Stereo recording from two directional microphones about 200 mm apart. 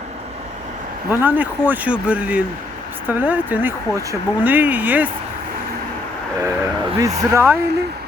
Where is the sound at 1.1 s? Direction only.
10° right (ahead or behind).